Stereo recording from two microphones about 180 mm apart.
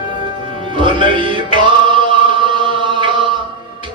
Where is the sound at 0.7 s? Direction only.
30° right (ahead or behind).